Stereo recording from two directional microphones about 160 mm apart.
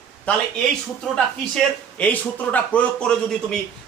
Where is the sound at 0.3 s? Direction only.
10° left (ahead or behind).